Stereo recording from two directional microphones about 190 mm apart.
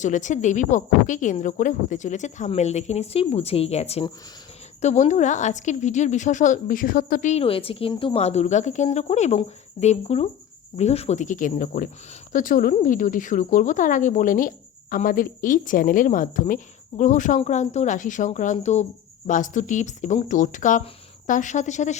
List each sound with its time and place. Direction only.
0.0 s a woman's voice: 40° left (ahead or behind)